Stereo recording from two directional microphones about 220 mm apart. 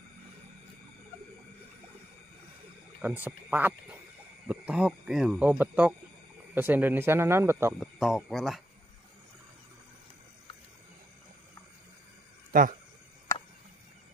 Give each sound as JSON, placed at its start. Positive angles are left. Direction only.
{"t": 3.0, "sound": "speech", "side_deg": -10}
{"t": 7.8, "sound": "speech", "side_deg": 0}
{"t": 12.5, "sound": "speech", "side_deg": -40}